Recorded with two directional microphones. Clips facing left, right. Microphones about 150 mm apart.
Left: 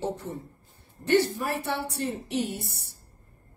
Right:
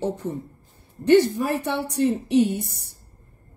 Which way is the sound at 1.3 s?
20° right (ahead or behind).